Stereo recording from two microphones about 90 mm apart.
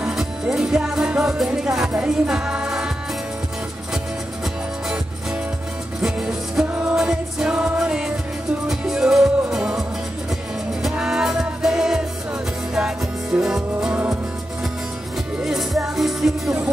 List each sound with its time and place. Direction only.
0.0 s music: 5° right (ahead or behind)
5.9 s music: 5° right (ahead or behind)
6.7 s music: 15° right (ahead or behind)
15.4 s music: 5° right (ahead or behind)